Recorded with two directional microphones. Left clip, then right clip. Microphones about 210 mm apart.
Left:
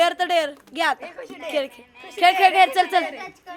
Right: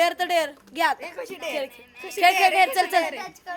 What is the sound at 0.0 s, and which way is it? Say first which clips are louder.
Speech: left 2 dB; 15° left (ahead or behind).